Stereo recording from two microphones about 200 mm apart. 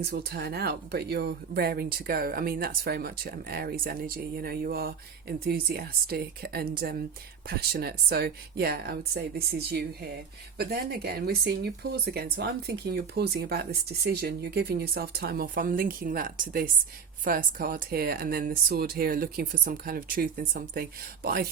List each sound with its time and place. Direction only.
0.0 s speech: 55° right (ahead or behind)